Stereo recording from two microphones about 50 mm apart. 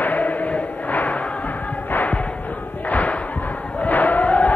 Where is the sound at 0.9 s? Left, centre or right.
Left.